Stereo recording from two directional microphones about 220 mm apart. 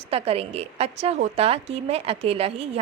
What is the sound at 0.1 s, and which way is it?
A woman's voice, 25° right (ahead or behind).